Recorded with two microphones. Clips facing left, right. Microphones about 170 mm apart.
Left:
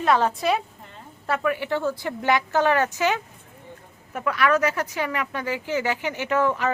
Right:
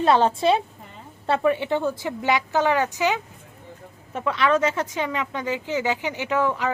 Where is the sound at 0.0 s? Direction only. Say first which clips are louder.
Right 3 dB; 30° right (ahead or behind).